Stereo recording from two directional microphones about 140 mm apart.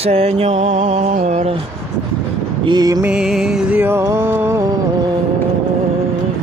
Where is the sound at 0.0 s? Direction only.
45° right (ahead or behind).